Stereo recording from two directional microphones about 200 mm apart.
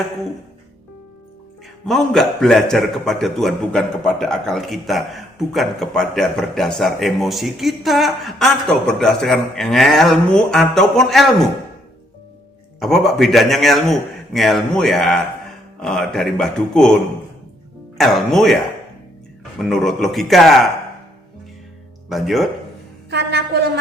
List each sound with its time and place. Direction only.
1.9 s a man's voice: centre (ahead or behind)
12.8 s a man's voice: centre (ahead or behind)
19.6 s a man's voice: centre (ahead or behind)
22.1 s a man's voice: centre (ahead or behind)
23.0 s a sound: 55° right (ahead or behind)